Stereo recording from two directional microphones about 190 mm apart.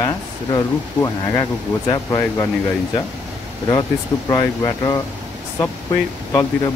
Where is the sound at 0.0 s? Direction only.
20° left (ahead or behind).